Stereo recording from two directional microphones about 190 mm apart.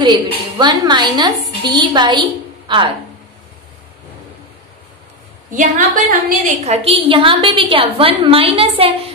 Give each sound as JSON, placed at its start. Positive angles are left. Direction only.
{"t": 0.0, "sound": "a woman's voice", "side_deg": -25}
{"t": 5.6, "sound": "a woman's voice", "side_deg": -45}